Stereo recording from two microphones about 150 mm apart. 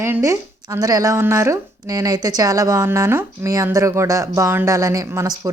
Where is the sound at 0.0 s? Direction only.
20° right (ahead or behind).